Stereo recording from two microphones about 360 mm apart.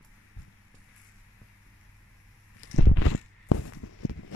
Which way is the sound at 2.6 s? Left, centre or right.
Left.